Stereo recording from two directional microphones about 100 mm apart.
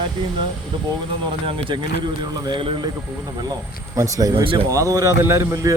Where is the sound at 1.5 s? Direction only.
60° right (ahead or behind).